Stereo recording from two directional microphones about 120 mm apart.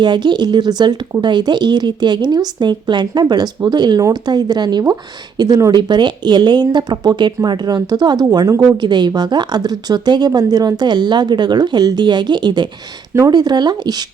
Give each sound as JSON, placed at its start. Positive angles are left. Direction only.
{"t": 0.0, "sound": "speech", "side_deg": -40}